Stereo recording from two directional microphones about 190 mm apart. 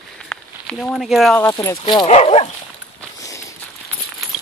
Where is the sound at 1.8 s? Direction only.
25° left (ahead or behind).